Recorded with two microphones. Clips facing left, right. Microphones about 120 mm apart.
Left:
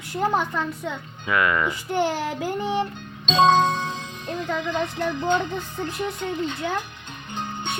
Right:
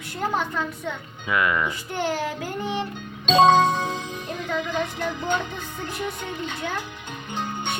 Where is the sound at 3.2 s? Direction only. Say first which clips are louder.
Right 2 dB; 10° right (ahead or behind).